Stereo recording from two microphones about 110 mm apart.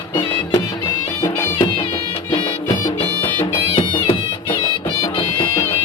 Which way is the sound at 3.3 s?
50° left (ahead or behind).